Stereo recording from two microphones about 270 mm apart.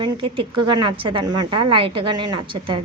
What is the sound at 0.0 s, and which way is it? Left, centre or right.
A woman's voice, centre.